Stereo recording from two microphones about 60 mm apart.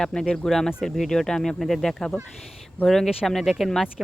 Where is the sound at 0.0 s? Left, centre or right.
Centre.